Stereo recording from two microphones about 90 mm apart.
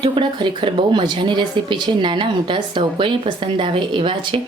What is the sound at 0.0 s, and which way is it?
Speech, 60° right (ahead or behind).